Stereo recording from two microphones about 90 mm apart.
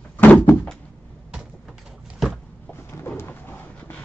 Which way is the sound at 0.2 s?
20° left (ahead or behind).